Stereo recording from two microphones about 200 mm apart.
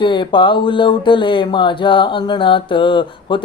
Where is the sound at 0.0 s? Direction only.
25° left (ahead or behind).